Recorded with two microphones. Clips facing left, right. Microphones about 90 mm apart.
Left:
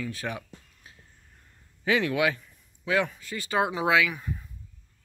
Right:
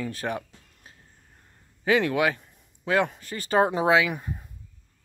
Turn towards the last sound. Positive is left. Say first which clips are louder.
# right 3 dB
turn(degrees=-45)  # may be behind; listen again after turning